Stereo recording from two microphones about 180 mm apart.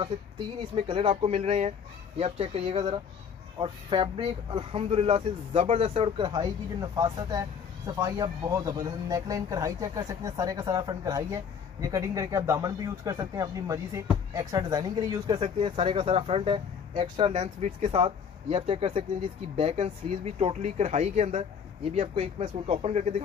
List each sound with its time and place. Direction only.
0.7 s speech: 30° right (ahead or behind)
17.3 s speech: 40° right (ahead or behind)